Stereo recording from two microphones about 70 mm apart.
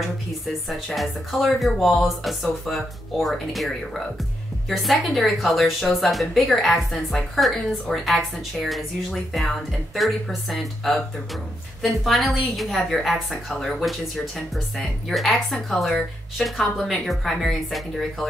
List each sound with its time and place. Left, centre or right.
0.7 s a woman's voice: centre